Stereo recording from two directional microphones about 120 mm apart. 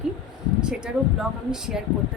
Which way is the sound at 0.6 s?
5° right (ahead or behind).